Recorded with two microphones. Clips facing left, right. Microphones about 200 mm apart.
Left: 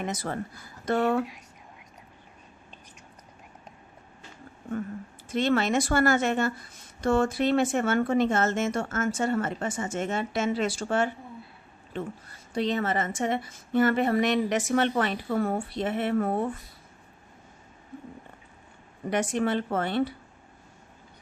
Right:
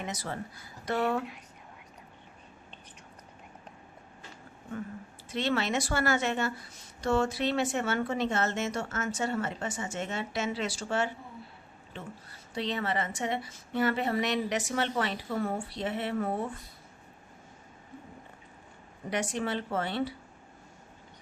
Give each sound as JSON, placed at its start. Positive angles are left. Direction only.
{"t": 0.0, "sound": "a woman's voice", "side_deg": 50}
{"t": 5.3, "sound": "a woman's voice", "side_deg": 50}
{"t": 12.5, "sound": "a woman's voice", "side_deg": 45}
{"t": 19.1, "sound": "a woman's voice", "side_deg": 50}